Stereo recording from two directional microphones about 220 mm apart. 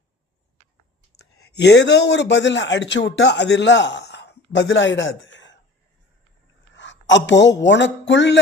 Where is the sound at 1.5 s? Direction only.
50° left (ahead or behind).